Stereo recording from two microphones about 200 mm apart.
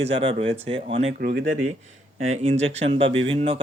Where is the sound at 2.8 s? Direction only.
30° right (ahead or behind).